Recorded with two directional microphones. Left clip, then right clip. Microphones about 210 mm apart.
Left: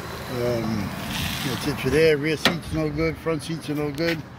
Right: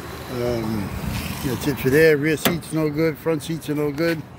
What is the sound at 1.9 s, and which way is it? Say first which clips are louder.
Speech: right 3 dB; 25° right (ahead or behind).